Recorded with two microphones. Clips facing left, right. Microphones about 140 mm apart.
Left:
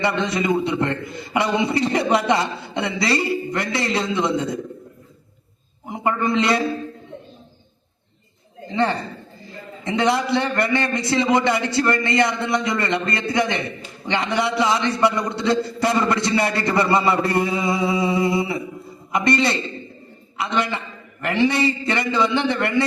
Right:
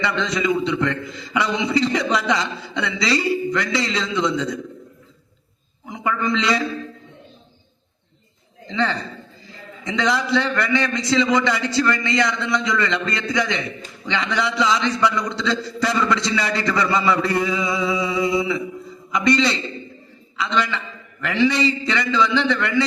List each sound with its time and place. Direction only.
0.0 s a man's voice: 55° left (ahead or behind)
5.8 s a man's voice: 50° left (ahead or behind)
8.7 s a man's voice: 55° left (ahead or behind)